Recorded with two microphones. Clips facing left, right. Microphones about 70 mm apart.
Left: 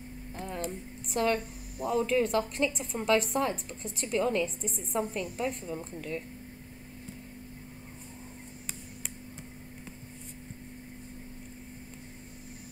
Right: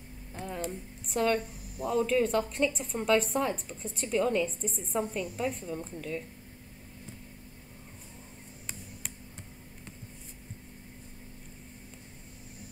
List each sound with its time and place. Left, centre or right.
0.3 s speech: centre